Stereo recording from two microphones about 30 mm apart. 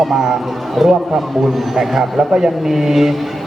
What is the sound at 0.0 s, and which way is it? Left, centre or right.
A man's voice, centre.